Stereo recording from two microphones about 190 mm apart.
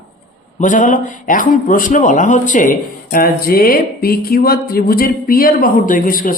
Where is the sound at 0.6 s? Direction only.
40° left (ahead or behind).